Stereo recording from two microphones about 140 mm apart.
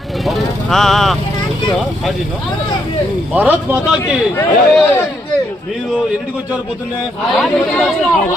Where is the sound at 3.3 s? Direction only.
15° right (ahead or behind).